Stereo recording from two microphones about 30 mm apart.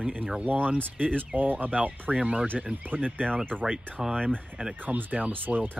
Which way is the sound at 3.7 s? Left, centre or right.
Centre.